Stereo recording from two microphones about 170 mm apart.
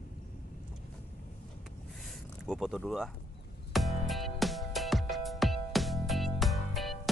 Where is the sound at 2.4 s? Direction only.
Centre (ahead or behind).